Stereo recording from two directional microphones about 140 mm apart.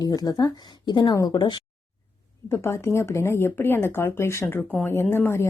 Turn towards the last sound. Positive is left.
turn(degrees=15)  # may be behind; listen again after turning